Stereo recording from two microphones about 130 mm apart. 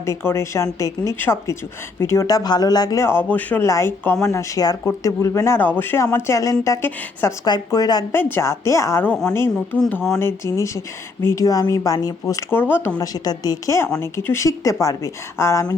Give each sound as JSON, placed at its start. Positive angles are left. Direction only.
{"t": 0.0, "sound": "speech", "side_deg": 20}
{"t": 7.4, "sound": "speech", "side_deg": 30}
{"t": 8.1, "sound": "a woman's voice", "side_deg": 15}
{"t": 9.8, "sound": "speech", "side_deg": 5}
{"t": 10.1, "sound": "a woman's voice", "side_deg": 20}
{"t": 13.0, "sound": "speech", "side_deg": 30}